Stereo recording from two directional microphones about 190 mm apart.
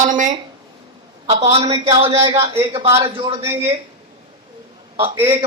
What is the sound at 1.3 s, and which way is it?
Speech, 35° right (ahead or behind).